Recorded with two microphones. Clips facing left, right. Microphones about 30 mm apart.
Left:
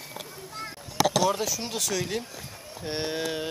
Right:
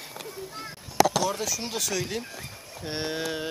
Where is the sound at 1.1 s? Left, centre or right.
Centre.